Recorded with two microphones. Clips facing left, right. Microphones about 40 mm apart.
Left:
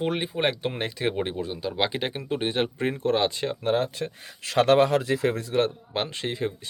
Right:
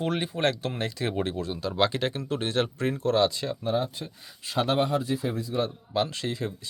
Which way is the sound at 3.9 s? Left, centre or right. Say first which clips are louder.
Left 7 dB; left.